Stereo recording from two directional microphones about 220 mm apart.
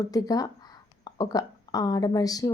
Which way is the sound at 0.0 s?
15° left (ahead or behind).